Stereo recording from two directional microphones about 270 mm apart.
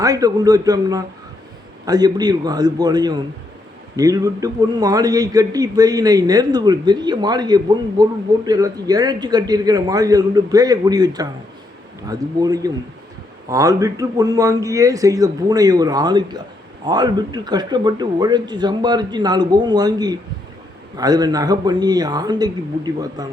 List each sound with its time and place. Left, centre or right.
0.0 s a man's voice: centre